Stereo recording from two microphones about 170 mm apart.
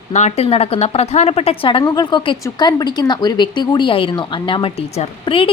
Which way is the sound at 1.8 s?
25° left (ahead or behind).